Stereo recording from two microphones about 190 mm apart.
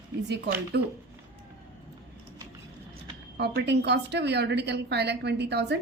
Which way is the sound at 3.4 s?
65° right (ahead or behind).